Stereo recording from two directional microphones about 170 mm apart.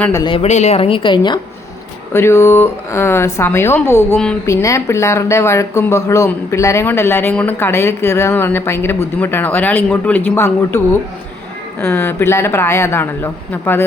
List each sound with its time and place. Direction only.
0.1 s speech: 20° left (ahead or behind)
0.3 s speech: 40° left (ahead or behind); by 1.4 s 25° left (ahead or behind)
2.1 s speech: 15° left (ahead or behind)
11.8 s speech: 15° left (ahead or behind)